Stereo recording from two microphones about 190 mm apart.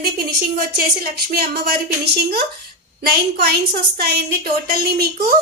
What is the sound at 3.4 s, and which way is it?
A woman's voice, 55° right (ahead or behind).